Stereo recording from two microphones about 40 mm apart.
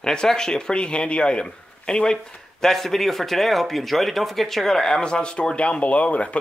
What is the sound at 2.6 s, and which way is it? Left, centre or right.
Speech, centre.